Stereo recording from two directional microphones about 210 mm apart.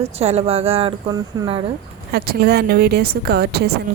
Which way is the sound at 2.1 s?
45° right (ahead or behind).